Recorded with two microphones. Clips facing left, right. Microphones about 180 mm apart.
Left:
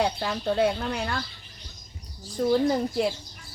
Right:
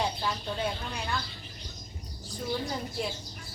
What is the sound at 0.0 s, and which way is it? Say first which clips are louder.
A woman's voice: left 6 dB; 65° left (ahead or behind).